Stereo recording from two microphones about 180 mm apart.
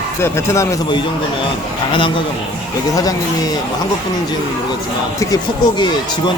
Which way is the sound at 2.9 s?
20° left (ahead or behind).